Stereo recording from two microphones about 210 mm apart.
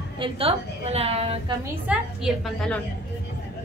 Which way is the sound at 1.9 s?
Centre (ahead or behind).